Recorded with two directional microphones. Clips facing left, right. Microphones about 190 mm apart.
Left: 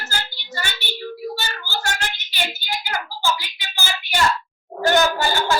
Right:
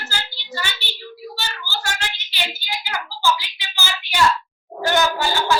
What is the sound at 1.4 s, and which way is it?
Child singing, 50° left (ahead or behind).